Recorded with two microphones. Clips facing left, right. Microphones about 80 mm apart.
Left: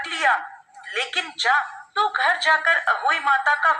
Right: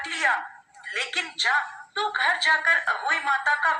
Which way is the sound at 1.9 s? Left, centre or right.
Left.